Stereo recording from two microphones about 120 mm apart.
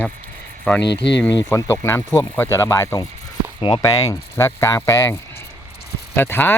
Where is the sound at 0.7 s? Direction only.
15° left (ahead or behind).